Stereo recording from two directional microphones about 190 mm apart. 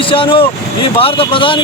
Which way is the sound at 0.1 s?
25° left (ahead or behind).